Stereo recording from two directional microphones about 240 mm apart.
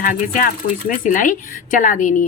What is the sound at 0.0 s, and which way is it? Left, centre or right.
Speech, left.